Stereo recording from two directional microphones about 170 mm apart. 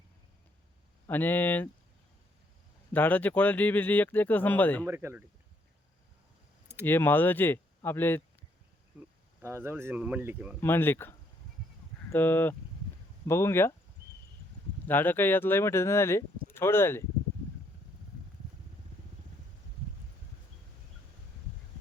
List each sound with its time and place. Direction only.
1.0 s speech: 10° left (ahead or behind)
2.9 s speech: 10° left (ahead or behind)
4.9 s speech: 15° right (ahead or behind)
6.8 s speech: 10° left (ahead or behind)
9.0 s speech: 15° right (ahead or behind)
10.6 s speech: 10° left (ahead or behind)
12.1 s speech: 10° left (ahead or behind)
14.8 s speech: 10° left (ahead or behind)